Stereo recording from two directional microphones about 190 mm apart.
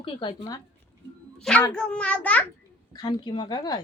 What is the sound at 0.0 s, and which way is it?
Speech, 25° left (ahead or behind).